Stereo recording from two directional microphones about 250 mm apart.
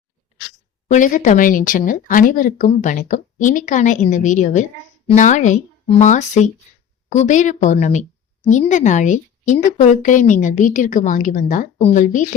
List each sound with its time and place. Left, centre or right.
0.9 s a woman's voice: left